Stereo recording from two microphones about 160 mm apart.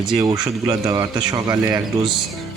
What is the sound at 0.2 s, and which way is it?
Speech, 25° right (ahead or behind).